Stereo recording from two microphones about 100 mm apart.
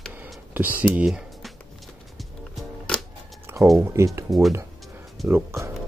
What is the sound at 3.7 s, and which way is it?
Speech, 30° right (ahead or behind).